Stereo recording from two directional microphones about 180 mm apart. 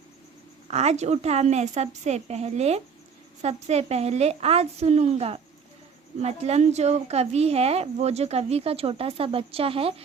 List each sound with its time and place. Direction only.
0.7 s speech: 35° right (ahead or behind)